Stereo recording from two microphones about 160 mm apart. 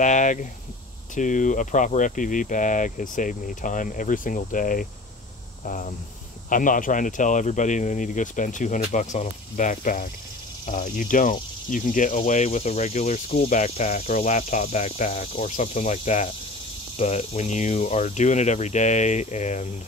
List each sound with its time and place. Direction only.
0.0 s speech: 50° left (ahead or behind)